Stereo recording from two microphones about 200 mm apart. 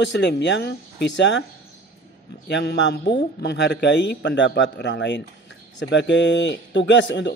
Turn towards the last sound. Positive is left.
turn(degrees=65)  # may be behind; listen again after turning